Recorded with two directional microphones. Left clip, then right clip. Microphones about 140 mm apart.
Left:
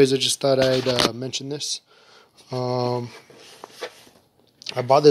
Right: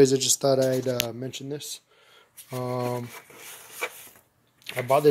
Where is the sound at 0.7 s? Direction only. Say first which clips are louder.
Left 6 dB; 20° left (ahead or behind).